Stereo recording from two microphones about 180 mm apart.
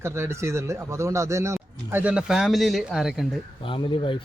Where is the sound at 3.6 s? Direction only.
30° left (ahead or behind).